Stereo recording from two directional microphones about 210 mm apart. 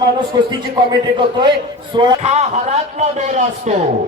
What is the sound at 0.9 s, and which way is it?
A man's voice, 20° right (ahead or behind).